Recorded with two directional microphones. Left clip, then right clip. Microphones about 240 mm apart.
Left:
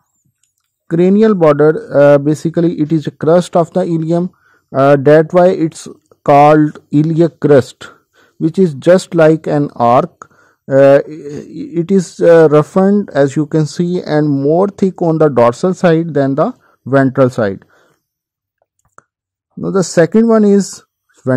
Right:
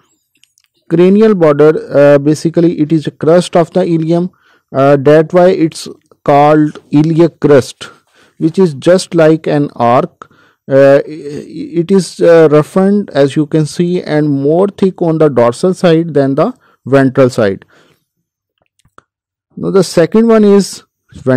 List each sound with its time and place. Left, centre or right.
0.8 s speech: right
19.0 s plop: right
19.6 s speech: right